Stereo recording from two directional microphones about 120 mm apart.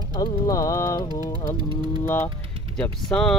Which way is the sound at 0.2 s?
25° left (ahead or behind).